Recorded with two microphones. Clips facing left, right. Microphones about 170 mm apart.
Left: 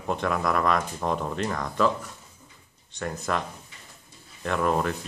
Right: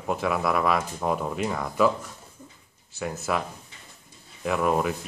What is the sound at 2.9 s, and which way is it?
Speech, 5° right (ahead or behind).